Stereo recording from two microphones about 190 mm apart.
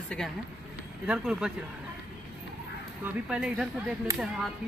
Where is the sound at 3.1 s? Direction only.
5° right (ahead or behind).